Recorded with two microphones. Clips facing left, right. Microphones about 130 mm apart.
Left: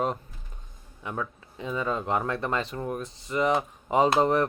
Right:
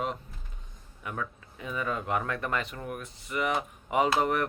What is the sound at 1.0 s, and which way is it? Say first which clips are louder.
Speech: left 3 dB; 25° left (ahead or behind).